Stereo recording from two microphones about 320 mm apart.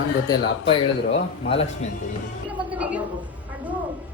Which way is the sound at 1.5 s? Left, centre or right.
Centre.